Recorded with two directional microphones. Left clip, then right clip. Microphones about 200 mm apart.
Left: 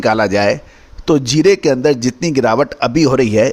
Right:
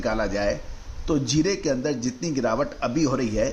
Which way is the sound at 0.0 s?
55° left (ahead or behind).